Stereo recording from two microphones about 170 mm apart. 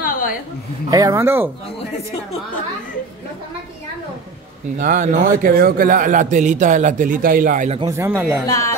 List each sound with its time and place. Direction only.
0.0 s a sound: 55° left (ahead or behind)
0.8 s speech: 20° right (ahead or behind)
4.7 s a man's voice: 45° right (ahead or behind)
7.9 s speech: 15° right (ahead or behind)
8.5 s speech: 20° left (ahead or behind)